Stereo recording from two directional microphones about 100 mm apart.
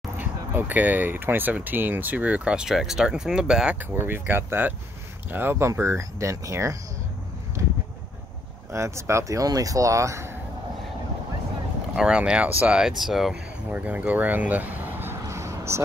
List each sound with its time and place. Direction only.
0.2 s speech: 15° right (ahead or behind)
3.9 s speech: 20° right (ahead or behind)
8.7 s speech: 30° right (ahead or behind)
12.0 s speech: 10° right (ahead or behind)
13.7 s a sound: 15° right (ahead or behind)